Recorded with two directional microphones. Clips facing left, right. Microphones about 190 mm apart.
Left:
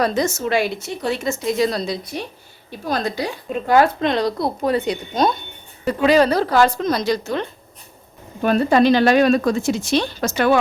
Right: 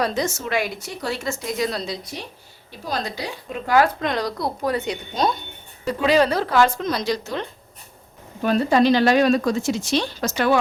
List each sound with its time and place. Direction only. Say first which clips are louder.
0.0 s speech: left 4 dB; 45° left (ahead or behind); by 1.6 s 20° left (ahead or behind)
2.9 s a woman's voice: left 5 dB; 50° left (ahead or behind)
3.7 s speech: left 3 dB; 25° left (ahead or behind)
5.2 s a woman's voice: left 3 dB; 50° left (ahead or behind)